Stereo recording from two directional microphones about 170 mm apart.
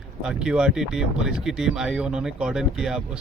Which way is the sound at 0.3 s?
5° right (ahead or behind).